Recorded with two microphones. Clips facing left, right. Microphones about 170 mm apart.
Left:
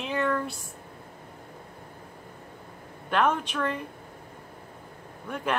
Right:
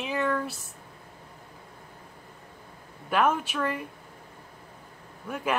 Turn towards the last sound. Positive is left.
turn(degrees=-5)  # may be behind; listen again after turning